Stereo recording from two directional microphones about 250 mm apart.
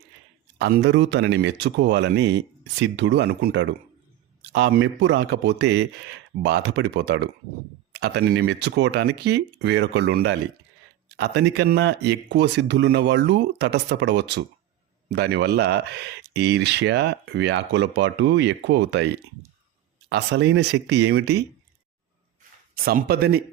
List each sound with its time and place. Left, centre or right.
0.6 s speech: right
22.8 s speech: right